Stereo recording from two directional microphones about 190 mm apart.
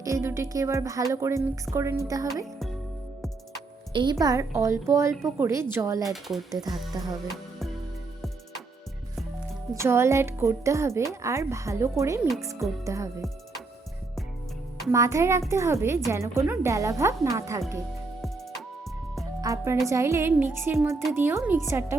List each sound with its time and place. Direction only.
0.0 s speech: 15° right (ahead or behind)
3.9 s speech: 20° right (ahead or behind)
6.2 s speech: centre (ahead or behind)
9.7 s speech: 15° right (ahead or behind)
14.8 s speech: 15° right (ahead or behind)
19.4 s speech: 20° right (ahead or behind)